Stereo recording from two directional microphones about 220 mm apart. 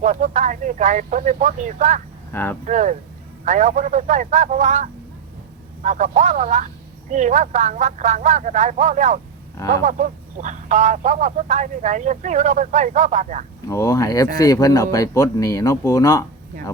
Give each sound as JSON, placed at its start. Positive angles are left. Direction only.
{"t": 0.0, "sound": "speech", "side_deg": -35}
{"t": 2.3, "sound": "speech", "side_deg": 10}
{"t": 2.6, "sound": "speech", "side_deg": -35}
{"t": 13.7, "sound": "speech", "side_deg": 15}